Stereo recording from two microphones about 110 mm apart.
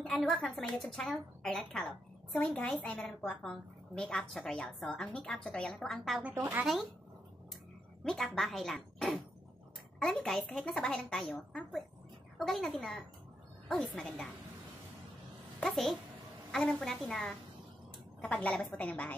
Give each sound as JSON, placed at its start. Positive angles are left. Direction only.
{"t": 0.0, "sound": "a woman's voice", "side_deg": 5}
{"t": 6.3, "sound": "speech", "side_deg": -25}
{"t": 6.6, "sound": "a woman's voice", "side_deg": 0}
{"t": 8.0, "sound": "a woman's voice", "side_deg": 5}
{"t": 12.4, "sound": "a woman's voice", "side_deg": 0}
{"t": 15.6, "sound": "a woman's voice", "side_deg": 0}